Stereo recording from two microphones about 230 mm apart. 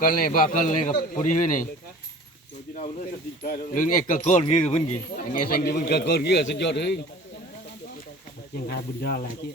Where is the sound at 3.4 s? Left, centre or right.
Left.